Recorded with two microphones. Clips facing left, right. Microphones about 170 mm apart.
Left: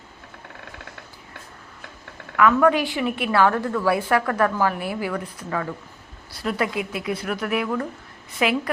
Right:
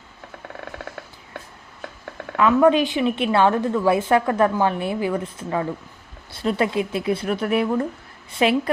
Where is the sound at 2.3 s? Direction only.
20° right (ahead or behind).